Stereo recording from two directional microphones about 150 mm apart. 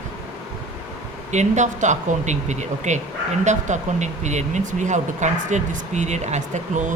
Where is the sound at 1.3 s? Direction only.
50° right (ahead or behind).